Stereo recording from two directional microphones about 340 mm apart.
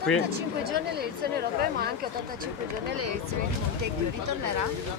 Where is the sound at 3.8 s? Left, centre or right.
Right.